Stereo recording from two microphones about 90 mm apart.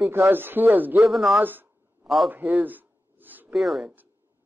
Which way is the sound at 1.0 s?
Centre (ahead or behind).